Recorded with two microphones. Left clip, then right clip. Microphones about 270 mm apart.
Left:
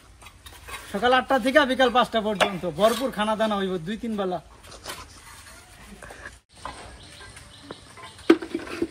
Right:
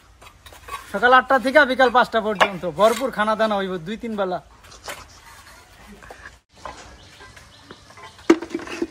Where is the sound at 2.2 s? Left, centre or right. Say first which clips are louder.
Right 4 dB; right.